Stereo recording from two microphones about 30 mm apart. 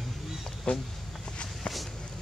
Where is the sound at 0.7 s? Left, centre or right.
Left.